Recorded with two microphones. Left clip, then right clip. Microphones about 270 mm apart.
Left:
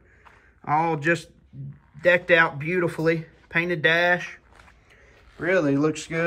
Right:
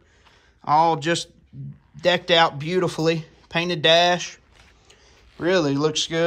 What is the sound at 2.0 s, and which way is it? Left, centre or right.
Speech, centre.